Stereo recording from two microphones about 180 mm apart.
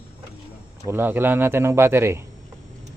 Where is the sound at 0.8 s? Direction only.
10° right (ahead or behind).